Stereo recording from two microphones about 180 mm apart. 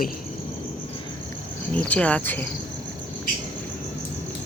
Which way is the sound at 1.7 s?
5° left (ahead or behind).